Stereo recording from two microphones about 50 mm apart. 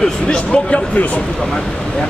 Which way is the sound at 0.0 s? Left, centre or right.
Centre.